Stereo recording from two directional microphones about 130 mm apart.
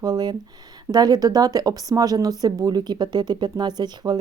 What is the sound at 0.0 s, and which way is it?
A woman's voice, 30° right (ahead or behind).